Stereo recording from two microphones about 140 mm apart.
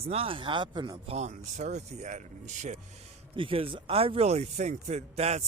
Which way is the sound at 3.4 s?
40° right (ahead or behind).